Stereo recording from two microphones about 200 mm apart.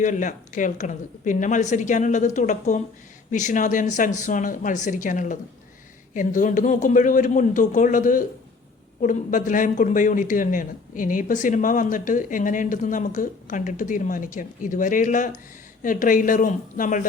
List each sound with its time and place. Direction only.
0.0 s speech: 40° left (ahead or behind)